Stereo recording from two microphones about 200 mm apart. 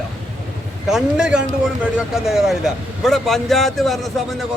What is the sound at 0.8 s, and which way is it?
Speech, 5° right (ahead or behind).